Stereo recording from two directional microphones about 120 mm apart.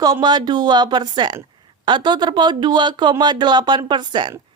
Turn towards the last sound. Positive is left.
turn(degrees=-40)  # may be behind; listen again after turning